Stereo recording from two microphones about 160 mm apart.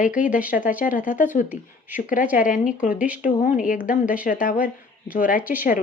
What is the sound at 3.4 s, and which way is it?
A woman's voice, 55° left (ahead or behind).